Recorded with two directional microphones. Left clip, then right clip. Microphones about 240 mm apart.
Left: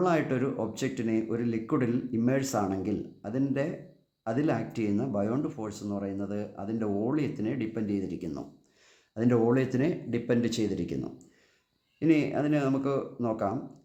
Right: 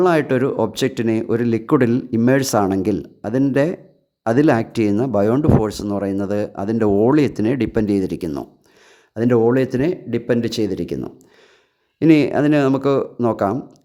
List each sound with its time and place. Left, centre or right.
0.0 s speech: right